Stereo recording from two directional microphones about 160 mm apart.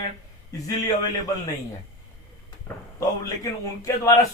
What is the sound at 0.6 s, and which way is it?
Speech, 20° left (ahead or behind).